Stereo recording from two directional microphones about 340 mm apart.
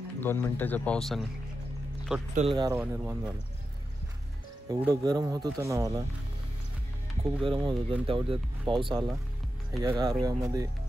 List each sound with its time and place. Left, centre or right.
0.2 s speech: centre
2.3 s speech: centre
4.6 s speech: centre
7.2 s speech: centre